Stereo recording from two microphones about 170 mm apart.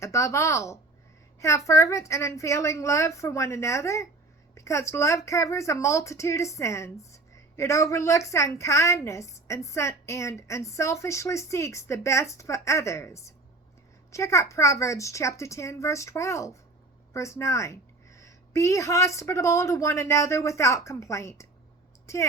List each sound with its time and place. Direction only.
0.0 s speech: 15° left (ahead or behind)